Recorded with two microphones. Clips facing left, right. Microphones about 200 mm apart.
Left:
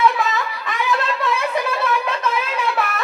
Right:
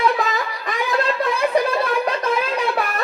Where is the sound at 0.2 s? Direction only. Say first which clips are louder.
Even; 40° right (ahead or behind).